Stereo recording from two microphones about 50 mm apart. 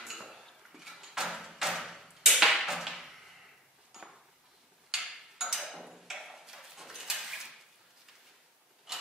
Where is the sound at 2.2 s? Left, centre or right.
Centre.